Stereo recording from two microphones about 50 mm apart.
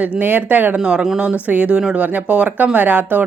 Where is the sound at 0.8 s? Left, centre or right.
Centre.